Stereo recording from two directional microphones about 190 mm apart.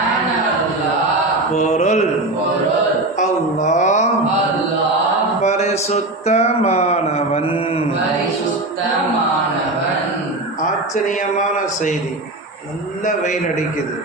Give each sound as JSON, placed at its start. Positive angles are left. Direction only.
{"t": 1.5, "sound": "speech", "side_deg": 40}
{"t": 3.2, "sound": "a sound", "side_deg": 40}
{"t": 5.4, "sound": "speech", "side_deg": 35}
{"t": 10.9, "sound": "speech", "side_deg": 40}
{"t": 13.1, "sound": "speech", "side_deg": 40}